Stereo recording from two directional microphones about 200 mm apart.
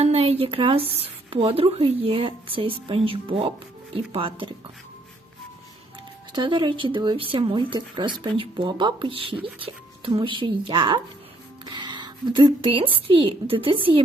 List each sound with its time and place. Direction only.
0.0 s speech: 30° right (ahead or behind)
6.3 s a woman's voice: 25° right (ahead or behind)